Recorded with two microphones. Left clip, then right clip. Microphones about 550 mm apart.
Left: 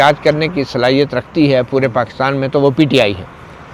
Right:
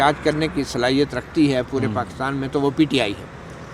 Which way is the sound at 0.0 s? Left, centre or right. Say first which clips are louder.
Left 7 dB; centre.